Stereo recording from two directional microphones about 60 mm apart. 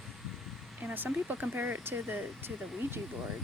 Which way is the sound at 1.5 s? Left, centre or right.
Right.